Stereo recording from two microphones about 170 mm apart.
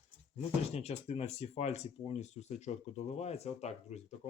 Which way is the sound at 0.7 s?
40° left (ahead or behind).